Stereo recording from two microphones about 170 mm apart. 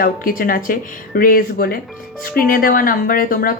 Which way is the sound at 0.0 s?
60° left (ahead or behind).